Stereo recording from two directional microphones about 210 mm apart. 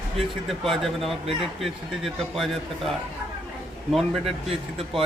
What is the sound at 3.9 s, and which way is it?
Speech, centre (ahead or behind).